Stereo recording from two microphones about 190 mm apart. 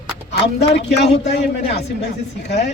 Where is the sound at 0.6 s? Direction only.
35° left (ahead or behind).